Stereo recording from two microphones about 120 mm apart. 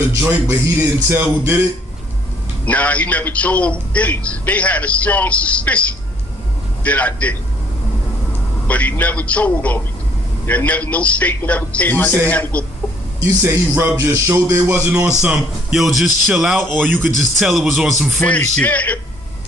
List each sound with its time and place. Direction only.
0.1 s music: 20° right (ahead or behind)
2.6 s a man's voice: 10° left (ahead or behind)
8.6 s a man's voice: 15° left (ahead or behind)
13.2 s music: 20° right (ahead or behind)
14.8 s speech: 10° right (ahead or behind)
16.7 s speech: 15° right (ahead or behind)
17.2 s speech: centre (ahead or behind)
18.5 s a man's voice: 10° left (ahead or behind)